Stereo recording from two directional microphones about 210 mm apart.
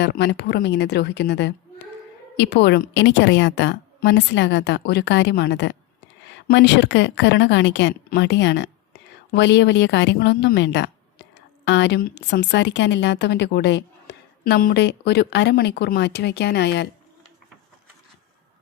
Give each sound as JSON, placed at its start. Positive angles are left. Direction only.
{"t": 0.0, "sound": "a woman's voice", "side_deg": 50}